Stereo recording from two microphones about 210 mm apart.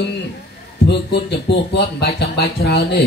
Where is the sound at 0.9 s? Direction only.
55° left (ahead or behind).